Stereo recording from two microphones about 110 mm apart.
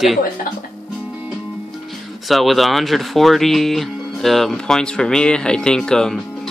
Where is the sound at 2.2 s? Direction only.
Centre (ahead or behind).